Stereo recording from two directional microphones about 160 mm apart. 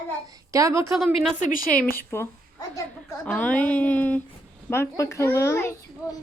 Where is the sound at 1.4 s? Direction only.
60° left (ahead or behind).